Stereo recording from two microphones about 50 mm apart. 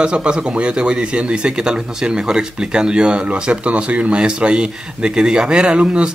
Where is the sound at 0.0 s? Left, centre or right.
Centre.